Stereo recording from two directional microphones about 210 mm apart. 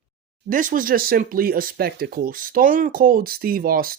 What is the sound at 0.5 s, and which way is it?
Speech, 40° right (ahead or behind).